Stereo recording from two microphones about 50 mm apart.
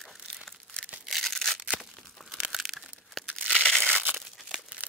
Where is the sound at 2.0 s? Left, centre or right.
Centre.